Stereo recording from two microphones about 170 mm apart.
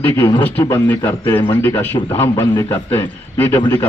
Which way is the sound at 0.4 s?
10° left (ahead or behind).